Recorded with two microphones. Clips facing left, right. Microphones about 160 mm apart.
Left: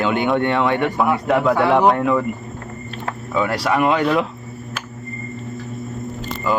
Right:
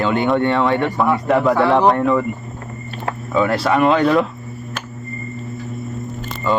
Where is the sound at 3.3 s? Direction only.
5° left (ahead or behind).